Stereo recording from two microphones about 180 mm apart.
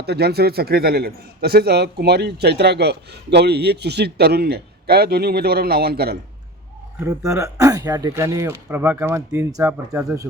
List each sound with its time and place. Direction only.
0.0 s a man's voice: 65° right (ahead or behind)
7.0 s speech: 15° right (ahead or behind)